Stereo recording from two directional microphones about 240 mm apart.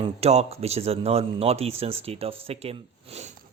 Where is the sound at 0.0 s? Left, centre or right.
Right.